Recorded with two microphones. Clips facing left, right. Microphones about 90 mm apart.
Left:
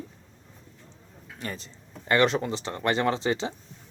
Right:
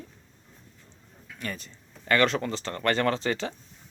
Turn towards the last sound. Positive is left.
turn(degrees=20)  # may be behind; listen again after turning